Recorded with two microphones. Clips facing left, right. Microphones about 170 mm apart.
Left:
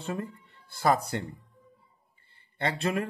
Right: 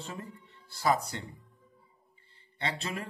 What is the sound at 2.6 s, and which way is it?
Speech, 55° left (ahead or behind).